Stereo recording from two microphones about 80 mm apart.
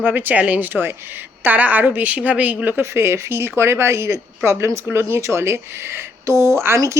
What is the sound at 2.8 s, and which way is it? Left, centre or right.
Speech, right.